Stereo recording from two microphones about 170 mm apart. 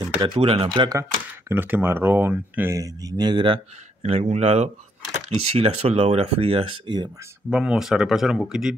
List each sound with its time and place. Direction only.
0.2 s speech: 30° right (ahead or behind)
1.5 s speech: 10° right (ahead or behind); by 7.1 s 30° right (ahead or behind)
7.4 s speech: 5° right (ahead or behind)